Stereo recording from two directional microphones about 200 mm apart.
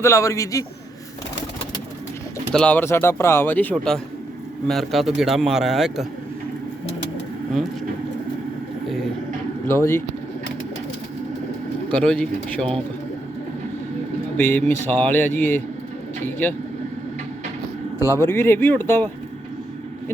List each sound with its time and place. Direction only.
0.0 s speech: 15° left (ahead or behind)
2.5 s a man's voice: 5° left (ahead or behind)
9.6 s speech: 10° left (ahead or behind)
11.9 s a man's voice: 5° left (ahead or behind)
14.3 s speech: 10° left (ahead or behind)
18.0 s speech: 15° left (ahead or behind)